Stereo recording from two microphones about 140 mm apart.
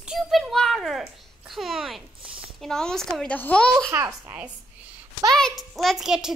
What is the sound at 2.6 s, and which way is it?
A child's voice, 5° left (ahead or behind).